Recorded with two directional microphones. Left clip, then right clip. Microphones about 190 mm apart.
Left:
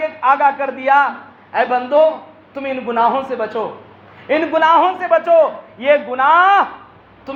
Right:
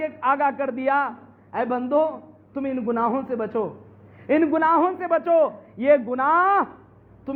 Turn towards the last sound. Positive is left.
turn(degrees=-55)  # may be behind; listen again after turning